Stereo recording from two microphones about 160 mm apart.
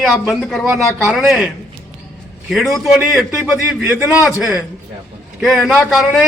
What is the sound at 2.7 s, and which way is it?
A man's voice, centre (ahead or behind).